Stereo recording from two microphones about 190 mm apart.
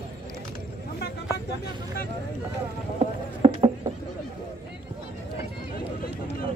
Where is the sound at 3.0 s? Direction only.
25° right (ahead or behind).